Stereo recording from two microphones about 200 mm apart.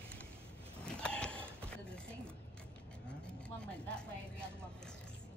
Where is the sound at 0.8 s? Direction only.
5° left (ahead or behind).